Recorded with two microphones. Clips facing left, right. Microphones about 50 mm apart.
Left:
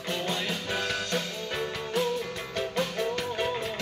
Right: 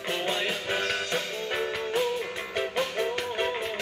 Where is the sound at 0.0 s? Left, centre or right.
Centre.